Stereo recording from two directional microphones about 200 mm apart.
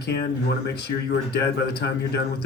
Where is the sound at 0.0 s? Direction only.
55° left (ahead or behind).